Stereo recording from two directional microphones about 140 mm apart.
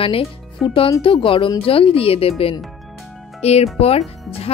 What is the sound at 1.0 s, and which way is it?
Speech, 40° left (ahead or behind).